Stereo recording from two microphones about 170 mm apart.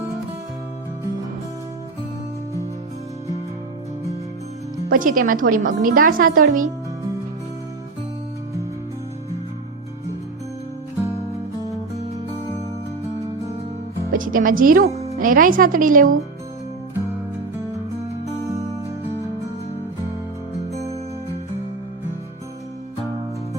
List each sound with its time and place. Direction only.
4.9 s a woman's voice: 55° right (ahead or behind)
14.1 s a woman's voice: 55° right (ahead or behind)
14.8 s music: 40° right (ahead or behind)
15.2 s a woman's voice: 55° right (ahead or behind)